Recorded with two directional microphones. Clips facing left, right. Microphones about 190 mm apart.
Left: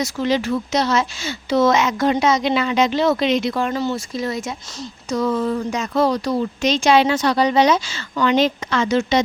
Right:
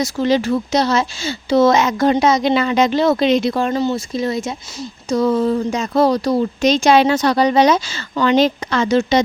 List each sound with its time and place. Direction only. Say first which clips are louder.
0.0 s speech: right 3 dB; 35° right (ahead or behind)